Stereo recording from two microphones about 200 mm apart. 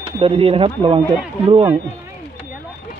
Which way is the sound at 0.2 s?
30° right (ahead or behind).